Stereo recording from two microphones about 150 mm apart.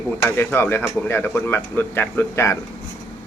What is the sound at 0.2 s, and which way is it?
Speech, 15° left (ahead or behind).